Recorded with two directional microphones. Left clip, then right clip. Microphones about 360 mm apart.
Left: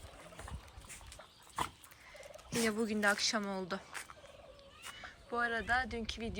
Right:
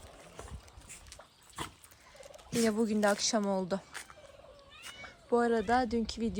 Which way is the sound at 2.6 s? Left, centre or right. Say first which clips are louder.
Right 3 dB; centre.